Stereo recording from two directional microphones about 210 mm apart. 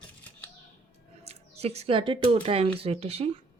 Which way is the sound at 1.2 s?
30° right (ahead or behind).